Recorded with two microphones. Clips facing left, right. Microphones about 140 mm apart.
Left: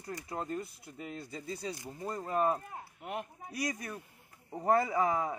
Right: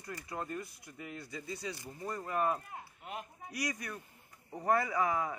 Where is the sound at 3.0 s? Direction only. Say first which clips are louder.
Left 6 dB; 60° left (ahead or behind).